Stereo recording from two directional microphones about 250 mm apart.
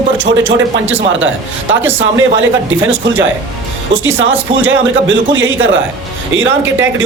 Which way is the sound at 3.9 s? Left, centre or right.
Right.